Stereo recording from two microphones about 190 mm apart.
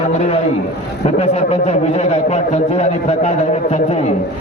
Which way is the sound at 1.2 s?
35° left (ahead or behind).